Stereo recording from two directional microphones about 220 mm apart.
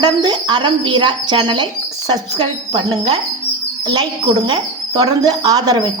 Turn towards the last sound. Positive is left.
turn(degrees=-15)  # may be behind; listen again after turning